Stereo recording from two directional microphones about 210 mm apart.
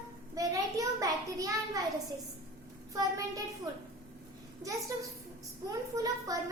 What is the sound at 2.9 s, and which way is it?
Speech, 15° right (ahead or behind).